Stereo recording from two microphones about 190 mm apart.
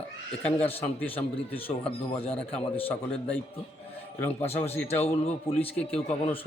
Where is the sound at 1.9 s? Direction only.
30° left (ahead or behind).